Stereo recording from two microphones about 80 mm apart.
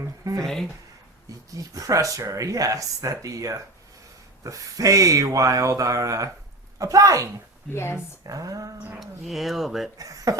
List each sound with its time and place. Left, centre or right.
0.4 s speech: centre
1.5 s speech: right
7.7 s speech: left
8.3 s speech: right
9.0 s speech: centre
10.0 s speech: right